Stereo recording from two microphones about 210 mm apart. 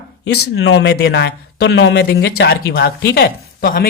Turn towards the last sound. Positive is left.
turn(degrees=45)  # may be behind; listen again after turning